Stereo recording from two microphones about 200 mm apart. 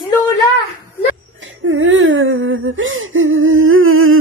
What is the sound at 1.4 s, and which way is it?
Whimper, 75° right (ahead or behind).